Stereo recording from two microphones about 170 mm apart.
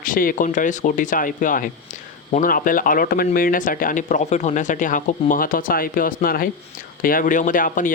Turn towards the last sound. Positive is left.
turn(degrees=50)  # may be behind; listen again after turning